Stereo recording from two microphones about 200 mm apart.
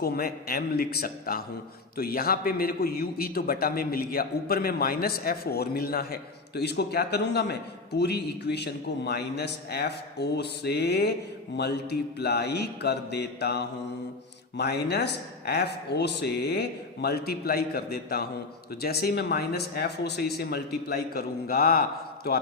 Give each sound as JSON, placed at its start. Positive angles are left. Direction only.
{"t": 0.0, "sound": "a man's voice", "side_deg": 50}